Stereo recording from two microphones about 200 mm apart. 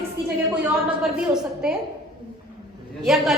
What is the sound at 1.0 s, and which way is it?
Speech, 5° right (ahead or behind).